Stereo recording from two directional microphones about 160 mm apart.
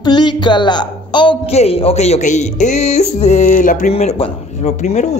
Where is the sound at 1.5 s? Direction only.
40° left (ahead or behind).